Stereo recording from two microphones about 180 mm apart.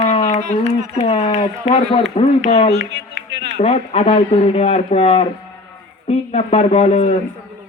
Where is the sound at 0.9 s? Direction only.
35° left (ahead or behind).